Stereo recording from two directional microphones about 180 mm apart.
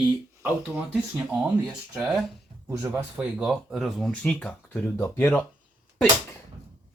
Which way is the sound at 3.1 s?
5° right (ahead or behind).